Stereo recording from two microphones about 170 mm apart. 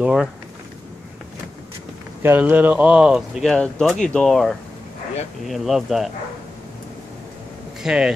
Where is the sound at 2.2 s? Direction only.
10° right (ahead or behind).